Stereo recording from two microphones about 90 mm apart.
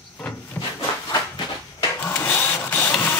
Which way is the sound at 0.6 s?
20° left (ahead or behind).